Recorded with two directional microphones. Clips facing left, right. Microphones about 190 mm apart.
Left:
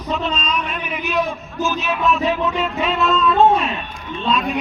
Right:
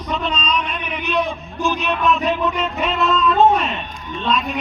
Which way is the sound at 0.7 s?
5° left (ahead or behind).